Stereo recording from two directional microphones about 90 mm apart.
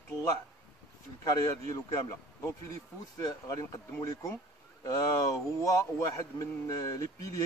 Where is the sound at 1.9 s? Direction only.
35° left (ahead or behind).